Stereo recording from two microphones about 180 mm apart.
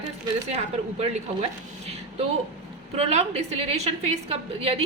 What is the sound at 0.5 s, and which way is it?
Speech, 35° right (ahead or behind).